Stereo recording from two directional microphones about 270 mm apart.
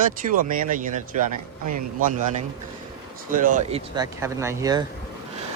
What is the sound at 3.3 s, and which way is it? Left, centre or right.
Speech, right.